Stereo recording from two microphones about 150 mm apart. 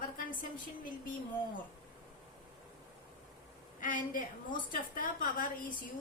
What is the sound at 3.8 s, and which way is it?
A woman's voice, 65° left (ahead or behind).